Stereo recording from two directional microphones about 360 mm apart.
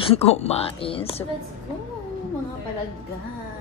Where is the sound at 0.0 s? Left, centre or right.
Centre.